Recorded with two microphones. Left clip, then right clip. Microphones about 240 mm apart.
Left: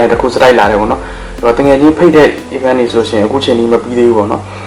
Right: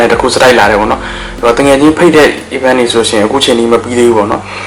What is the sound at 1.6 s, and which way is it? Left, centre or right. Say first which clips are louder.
Speech: even; left.